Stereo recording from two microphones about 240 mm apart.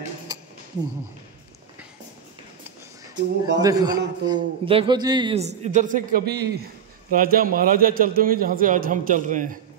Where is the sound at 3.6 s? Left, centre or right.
Centre.